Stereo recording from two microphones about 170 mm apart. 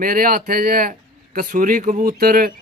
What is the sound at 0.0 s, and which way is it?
Speech, 55° right (ahead or behind).